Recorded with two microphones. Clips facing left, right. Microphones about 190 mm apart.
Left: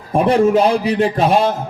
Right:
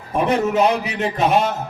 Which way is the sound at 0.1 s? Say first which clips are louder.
Left 6 dB; 30° left (ahead or behind).